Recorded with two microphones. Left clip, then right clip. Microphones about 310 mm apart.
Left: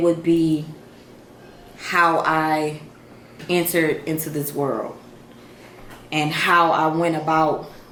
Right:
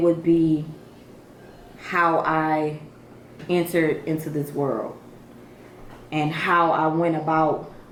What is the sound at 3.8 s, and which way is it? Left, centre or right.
Speech, centre.